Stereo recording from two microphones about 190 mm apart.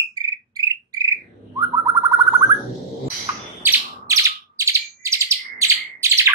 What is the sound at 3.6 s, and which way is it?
Bird, 15° right (ahead or behind).